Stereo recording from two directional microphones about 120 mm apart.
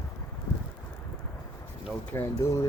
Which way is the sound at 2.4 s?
25° left (ahead or behind).